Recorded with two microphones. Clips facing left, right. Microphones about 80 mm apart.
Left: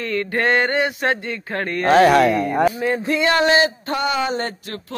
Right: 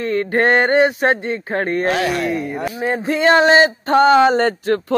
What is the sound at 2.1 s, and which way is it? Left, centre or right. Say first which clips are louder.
Speech: left 5 dB; left.